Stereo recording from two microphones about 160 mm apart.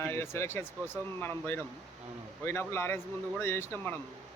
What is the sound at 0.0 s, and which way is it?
Speech, 15° left (ahead or behind).